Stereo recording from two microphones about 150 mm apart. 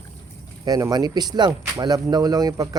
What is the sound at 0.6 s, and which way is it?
Speech, 25° right (ahead or behind).